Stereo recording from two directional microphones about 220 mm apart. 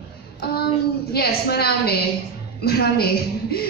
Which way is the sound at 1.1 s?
45° left (ahead or behind).